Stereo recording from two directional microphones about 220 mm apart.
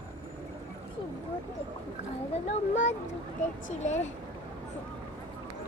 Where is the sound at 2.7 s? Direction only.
35° left (ahead or behind).